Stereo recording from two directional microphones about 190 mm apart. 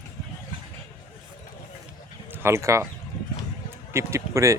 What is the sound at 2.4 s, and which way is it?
Speech, 15° right (ahead or behind).